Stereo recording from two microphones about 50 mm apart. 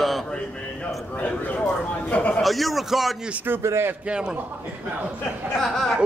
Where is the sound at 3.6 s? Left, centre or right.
Right.